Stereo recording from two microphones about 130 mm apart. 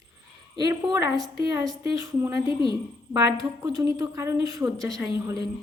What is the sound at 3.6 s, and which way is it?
A woman's voice, 30° right (ahead or behind).